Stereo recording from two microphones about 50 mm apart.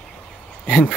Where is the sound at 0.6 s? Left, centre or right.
Right.